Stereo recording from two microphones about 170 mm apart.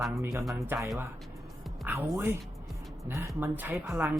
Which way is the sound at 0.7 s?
15° right (ahead or behind).